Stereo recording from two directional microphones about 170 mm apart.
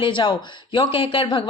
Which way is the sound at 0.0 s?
30° left (ahead or behind).